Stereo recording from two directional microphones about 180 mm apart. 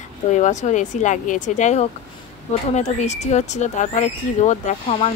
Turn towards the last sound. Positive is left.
turn(degrees=35)  # may be behind; listen again after turning